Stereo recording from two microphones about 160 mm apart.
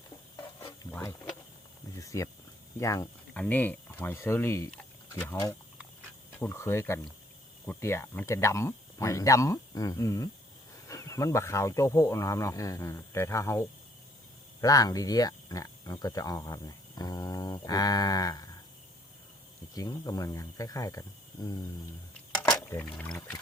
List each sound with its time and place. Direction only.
0.9 s speech: 15° left (ahead or behind)
4.7 s a sound: 10° left (ahead or behind)
6.4 s speech: 15° left (ahead or behind)
19.7 s speech: 20° left (ahead or behind)
22.7 s speech: 15° left (ahead or behind)